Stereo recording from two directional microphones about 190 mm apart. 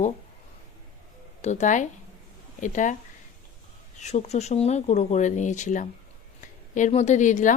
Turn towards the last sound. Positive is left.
turn(degrees=40)  # may be behind; listen again after turning